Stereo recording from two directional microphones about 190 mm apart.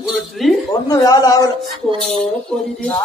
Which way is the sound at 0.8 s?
20° left (ahead or behind).